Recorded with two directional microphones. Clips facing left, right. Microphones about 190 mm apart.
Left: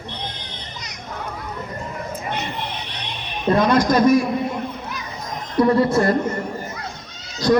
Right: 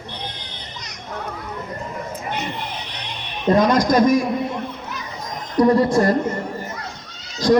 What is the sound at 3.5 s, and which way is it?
Speech, 10° right (ahead or behind).